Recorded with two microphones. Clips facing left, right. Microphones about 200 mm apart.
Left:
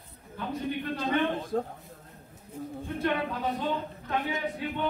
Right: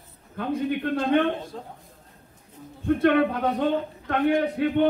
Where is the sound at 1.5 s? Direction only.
50° left (ahead or behind).